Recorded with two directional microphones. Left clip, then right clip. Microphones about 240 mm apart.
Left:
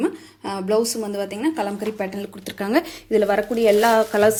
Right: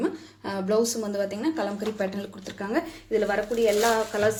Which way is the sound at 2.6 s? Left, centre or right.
Left.